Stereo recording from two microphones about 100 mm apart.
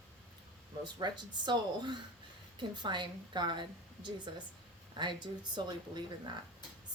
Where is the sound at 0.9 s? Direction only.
50° right (ahead or behind).